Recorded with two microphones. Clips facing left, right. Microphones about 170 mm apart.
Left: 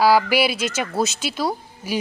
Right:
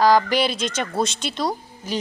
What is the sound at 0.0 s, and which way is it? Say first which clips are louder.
A child's voice: even; 10° left (ahead or behind).